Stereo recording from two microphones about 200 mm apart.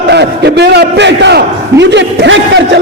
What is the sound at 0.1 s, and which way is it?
A man's voice, 55° right (ahead or behind).